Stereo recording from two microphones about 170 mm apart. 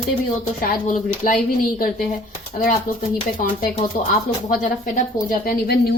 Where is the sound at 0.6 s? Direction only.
50° left (ahead or behind).